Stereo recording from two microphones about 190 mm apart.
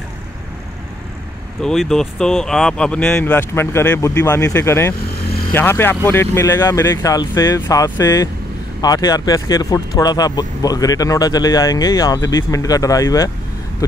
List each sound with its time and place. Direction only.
1.6 s speech: centre (ahead or behind); by 13.3 s 20° left (ahead or behind)